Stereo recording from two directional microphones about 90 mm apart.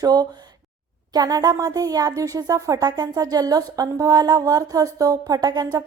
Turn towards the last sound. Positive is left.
turn(degrees=-45)  # may be behind; listen again after turning